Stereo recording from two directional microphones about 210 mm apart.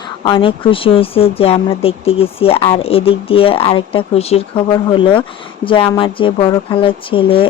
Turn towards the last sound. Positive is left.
turn(degrees=25)  # may be behind; listen again after turning